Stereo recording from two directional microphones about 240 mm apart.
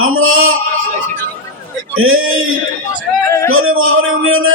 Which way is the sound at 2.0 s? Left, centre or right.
Right.